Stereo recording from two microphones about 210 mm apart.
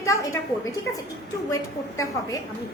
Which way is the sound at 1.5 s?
15° left (ahead or behind).